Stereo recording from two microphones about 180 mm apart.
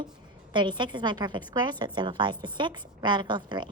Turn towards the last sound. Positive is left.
turn(degrees=-25)  # may be behind; listen again after turning